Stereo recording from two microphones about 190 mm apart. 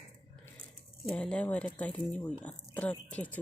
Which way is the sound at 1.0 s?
5° left (ahead or behind).